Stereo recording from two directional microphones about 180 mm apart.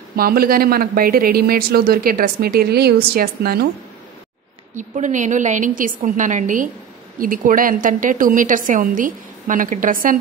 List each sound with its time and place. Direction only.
0.1 s speech: 55° right (ahead or behind)
4.7 s a woman's voice: 45° right (ahead or behind)